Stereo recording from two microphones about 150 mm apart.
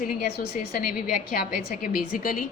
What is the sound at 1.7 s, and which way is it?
Speech, 65° left (ahead or behind).